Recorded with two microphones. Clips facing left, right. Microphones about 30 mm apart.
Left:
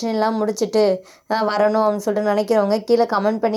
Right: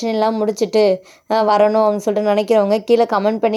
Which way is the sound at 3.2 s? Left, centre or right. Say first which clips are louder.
Right 2 dB; right.